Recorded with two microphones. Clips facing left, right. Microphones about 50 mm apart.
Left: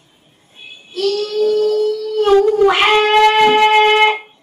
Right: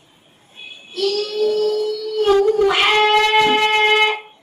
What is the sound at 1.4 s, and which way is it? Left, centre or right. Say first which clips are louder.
Music: left 3 dB; centre.